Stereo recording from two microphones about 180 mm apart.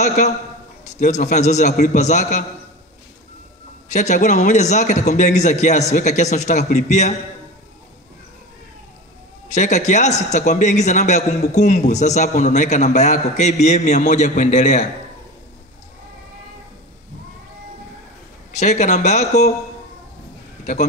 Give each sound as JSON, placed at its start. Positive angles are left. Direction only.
{"t": 0.0, "sound": "a man's voice", "side_deg": 45}
{"t": 3.9, "sound": "a man's voice", "side_deg": 40}
{"t": 9.5, "sound": "a man's voice", "side_deg": 40}
{"t": 18.5, "sound": "a man's voice", "side_deg": 40}
{"t": 20.7, "sound": "a man's voice", "side_deg": 45}